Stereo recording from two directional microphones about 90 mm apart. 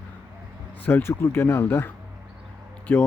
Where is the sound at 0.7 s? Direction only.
20° left (ahead or behind).